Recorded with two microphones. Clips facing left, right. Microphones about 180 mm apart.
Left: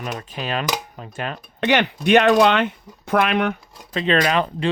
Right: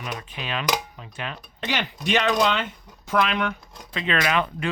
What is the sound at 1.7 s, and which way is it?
Speech, 60° left (ahead or behind).